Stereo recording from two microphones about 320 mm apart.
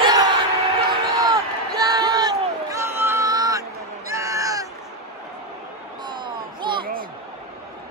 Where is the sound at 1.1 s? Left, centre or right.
Centre.